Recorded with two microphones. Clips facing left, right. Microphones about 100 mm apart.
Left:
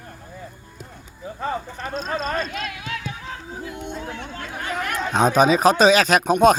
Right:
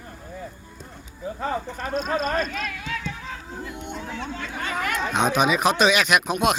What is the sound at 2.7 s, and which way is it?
Speech, 65° left (ahead or behind).